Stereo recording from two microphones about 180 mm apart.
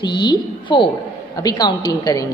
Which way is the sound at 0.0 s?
25° left (ahead or behind).